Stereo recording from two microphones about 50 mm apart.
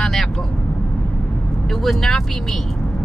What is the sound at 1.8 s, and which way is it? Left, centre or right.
Speech, centre.